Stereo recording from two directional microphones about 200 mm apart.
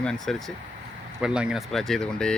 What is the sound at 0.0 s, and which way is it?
Speech, 5° left (ahead or behind).